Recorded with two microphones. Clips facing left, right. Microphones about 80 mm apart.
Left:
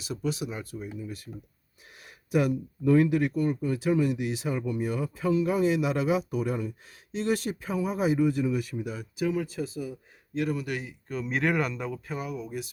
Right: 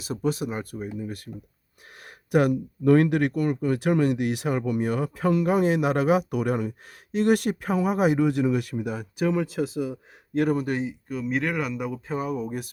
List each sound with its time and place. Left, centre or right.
0.0 s speech: right
10.3 s speech: right
11.1 s speech: centre
12.0 s speech: right